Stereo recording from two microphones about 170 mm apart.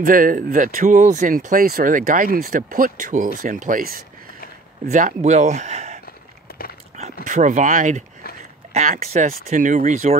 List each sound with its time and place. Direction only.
0.0 s speech: 55° right (ahead or behind)
4.9 s speech: 45° right (ahead or behind)
7.2 s speech: 45° right (ahead or behind)